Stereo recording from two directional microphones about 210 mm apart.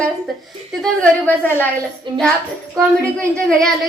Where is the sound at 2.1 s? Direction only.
20° right (ahead or behind).